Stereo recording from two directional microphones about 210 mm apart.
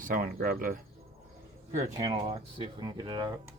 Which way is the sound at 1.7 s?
20° right (ahead or behind).